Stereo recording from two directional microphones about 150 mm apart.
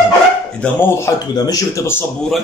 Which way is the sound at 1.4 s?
25° left (ahead or behind).